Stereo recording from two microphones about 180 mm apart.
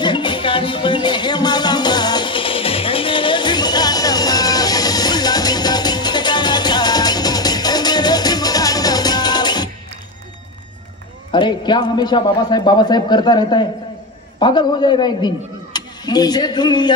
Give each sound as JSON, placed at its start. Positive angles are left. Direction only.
{"t": 0.0, "sound": "music", "side_deg": 25}
{"t": 11.3, "sound": "a man's voice", "side_deg": 25}